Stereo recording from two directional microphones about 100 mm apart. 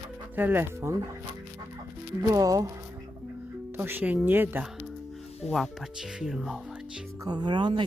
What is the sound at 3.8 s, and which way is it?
Speech, 20° right (ahead or behind).